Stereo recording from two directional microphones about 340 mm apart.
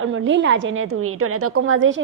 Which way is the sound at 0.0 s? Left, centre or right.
Right.